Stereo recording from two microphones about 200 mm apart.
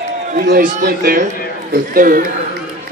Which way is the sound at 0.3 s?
45° right (ahead or behind).